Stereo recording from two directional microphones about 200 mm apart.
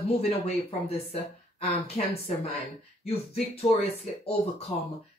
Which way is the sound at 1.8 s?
30° left (ahead or behind).